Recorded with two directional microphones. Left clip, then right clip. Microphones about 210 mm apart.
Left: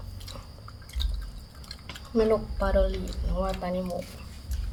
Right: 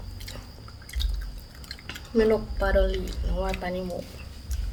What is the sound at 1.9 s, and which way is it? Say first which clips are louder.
A woman's voice: right 2 dB; 20° right (ahead or behind).